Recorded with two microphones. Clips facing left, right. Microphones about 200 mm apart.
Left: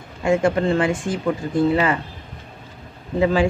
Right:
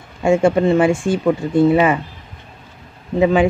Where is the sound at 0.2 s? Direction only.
25° right (ahead or behind).